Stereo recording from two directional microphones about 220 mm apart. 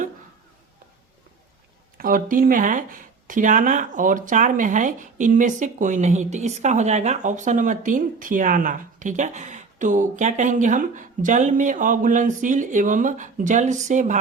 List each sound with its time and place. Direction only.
2.0 s speech: 40° right (ahead or behind)